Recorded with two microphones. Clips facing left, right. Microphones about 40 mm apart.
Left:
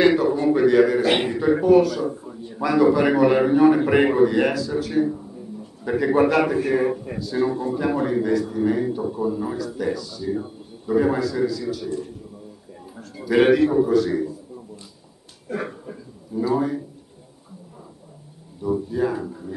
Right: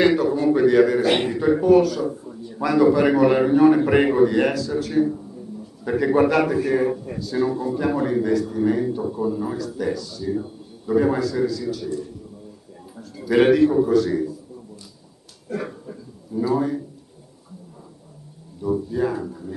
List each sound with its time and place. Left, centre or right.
0.0 s a man's voice: centre
7.2 s a man's voice: centre
10.3 s a sound: centre
11.0 s a man's voice: centre
13.1 s a man's voice: centre
15.4 s speech: left
16.3 s a man's voice: centre
18.6 s a man's voice: centre